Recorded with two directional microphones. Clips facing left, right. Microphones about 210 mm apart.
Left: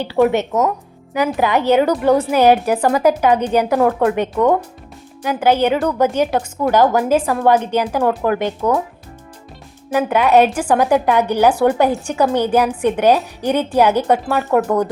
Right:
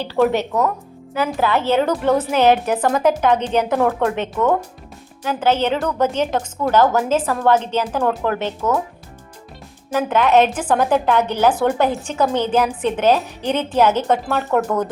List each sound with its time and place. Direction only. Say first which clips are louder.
0.0 s a woman's voice: left 2 dB; 15° left (ahead or behind)
10.0 s a woman's voice: left 2 dB; 10° left (ahead or behind)
14.3 s speech: left 3 dB; centre (ahead or behind)